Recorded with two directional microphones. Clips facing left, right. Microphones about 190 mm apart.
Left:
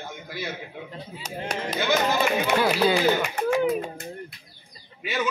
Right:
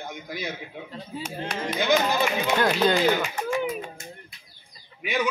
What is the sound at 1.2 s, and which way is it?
Speech, 40° left (ahead or behind).